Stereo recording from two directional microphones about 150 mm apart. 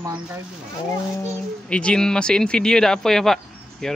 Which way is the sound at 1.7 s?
5° left (ahead or behind).